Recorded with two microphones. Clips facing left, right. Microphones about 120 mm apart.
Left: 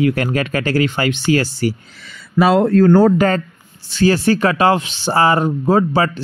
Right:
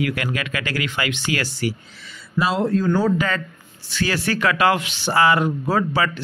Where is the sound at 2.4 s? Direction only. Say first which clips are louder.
Left 8 dB; 60° left (ahead or behind).